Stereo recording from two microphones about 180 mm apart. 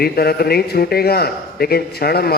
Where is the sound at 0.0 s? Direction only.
60° left (ahead or behind).